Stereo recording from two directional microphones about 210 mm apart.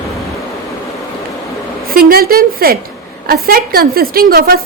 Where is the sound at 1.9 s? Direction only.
45° right (ahead or behind).